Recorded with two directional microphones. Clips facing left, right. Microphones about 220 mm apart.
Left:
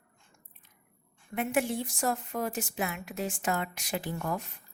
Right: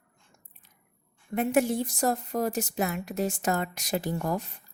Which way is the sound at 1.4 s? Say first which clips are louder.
Right 5 dB; 40° right (ahead or behind).